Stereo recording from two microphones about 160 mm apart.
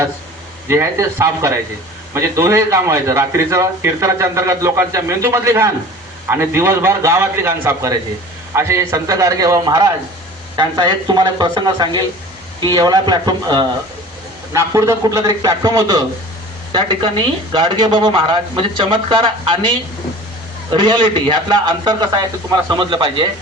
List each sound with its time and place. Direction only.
0.7 s a man's voice: 20° right (ahead or behind)
16.7 s a man's voice: 30° right (ahead or behind)